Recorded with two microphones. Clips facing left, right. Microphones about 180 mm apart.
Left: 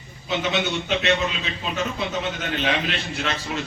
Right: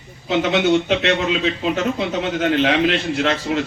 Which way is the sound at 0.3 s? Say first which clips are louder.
Right 8 dB; 90° right.